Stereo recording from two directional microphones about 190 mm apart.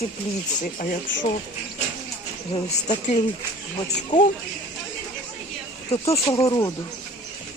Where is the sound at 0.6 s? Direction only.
45° left (ahead or behind).